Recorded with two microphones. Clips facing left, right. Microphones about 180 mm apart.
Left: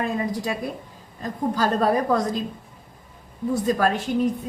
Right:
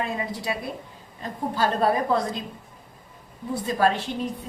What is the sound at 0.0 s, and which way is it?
A woman's voice, 45° left (ahead or behind).